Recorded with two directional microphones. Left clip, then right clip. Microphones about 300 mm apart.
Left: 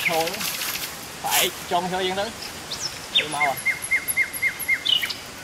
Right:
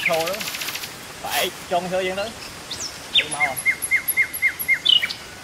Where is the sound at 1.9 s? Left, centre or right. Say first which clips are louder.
Right 1 dB; centre.